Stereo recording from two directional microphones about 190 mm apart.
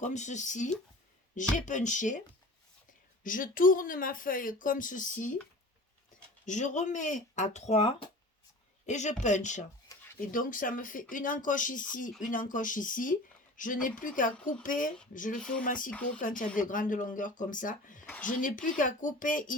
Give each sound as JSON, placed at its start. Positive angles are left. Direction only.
{"t": 0.0, "sound": "speech", "side_deg": 40}
{"t": 3.2, "sound": "speech", "side_deg": 45}
{"t": 6.4, "sound": "speech", "side_deg": 40}
{"t": 15.9, "sound": "speech", "side_deg": 5}
{"t": 16.2, "sound": "speech", "side_deg": 45}
{"t": 18.0, "sound": "speech", "side_deg": 10}
{"t": 18.3, "sound": "speech", "side_deg": 45}